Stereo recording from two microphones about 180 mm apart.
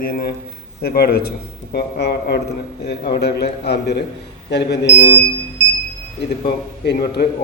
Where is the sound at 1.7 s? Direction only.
70° left (ahead or behind).